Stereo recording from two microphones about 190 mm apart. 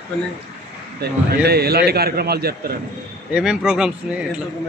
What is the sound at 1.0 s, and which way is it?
A man's voice, 55° right (ahead or behind).